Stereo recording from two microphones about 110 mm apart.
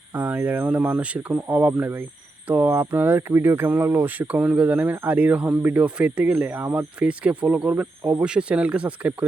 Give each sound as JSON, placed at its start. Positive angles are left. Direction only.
{"t": 0.1, "sound": "speech", "side_deg": -15}